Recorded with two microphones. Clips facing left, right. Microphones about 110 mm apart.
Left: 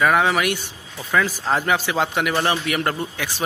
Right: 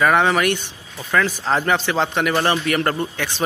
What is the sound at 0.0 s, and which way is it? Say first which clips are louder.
A man's voice: right 2 dB; centre (ahead or behind).